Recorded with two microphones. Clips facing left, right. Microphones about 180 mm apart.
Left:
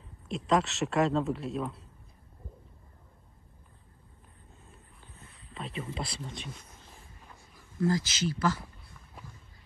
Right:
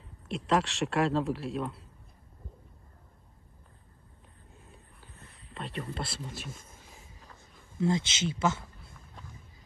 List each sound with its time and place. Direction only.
0.0 s speech: centre (ahead or behind)
5.5 s speech: centre (ahead or behind)
6.5 s speech: 50° right (ahead or behind)
7.8 s speech: 25° right (ahead or behind)